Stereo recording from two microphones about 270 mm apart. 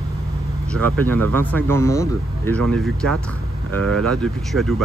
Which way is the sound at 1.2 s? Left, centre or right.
Right.